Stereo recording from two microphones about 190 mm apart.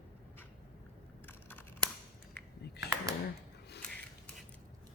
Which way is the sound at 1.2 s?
10° left (ahead or behind).